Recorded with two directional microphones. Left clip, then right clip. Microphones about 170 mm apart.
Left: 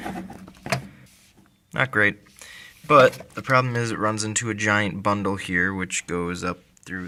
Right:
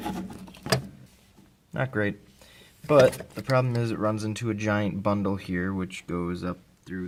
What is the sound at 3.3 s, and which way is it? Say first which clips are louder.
Speech: left 5 dB; 5° left (ahead or behind).